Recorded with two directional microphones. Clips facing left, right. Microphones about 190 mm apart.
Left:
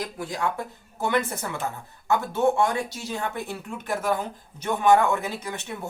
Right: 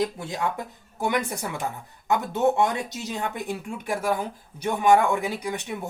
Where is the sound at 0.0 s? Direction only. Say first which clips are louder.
Right 2 dB; 25° right (ahead or behind).